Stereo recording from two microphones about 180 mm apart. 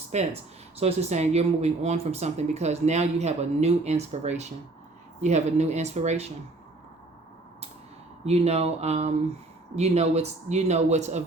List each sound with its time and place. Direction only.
0.1 s speech: 40° right (ahead or behind)
8.2 s speech: 35° right (ahead or behind)